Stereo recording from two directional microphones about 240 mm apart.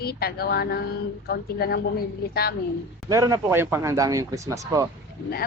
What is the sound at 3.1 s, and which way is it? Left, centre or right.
Speech, centre.